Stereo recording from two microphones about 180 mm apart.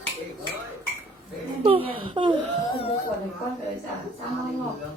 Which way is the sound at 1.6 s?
30° right (ahead or behind).